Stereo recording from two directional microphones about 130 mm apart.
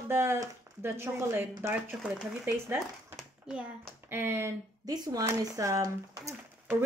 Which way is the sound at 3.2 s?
5° right (ahead or behind).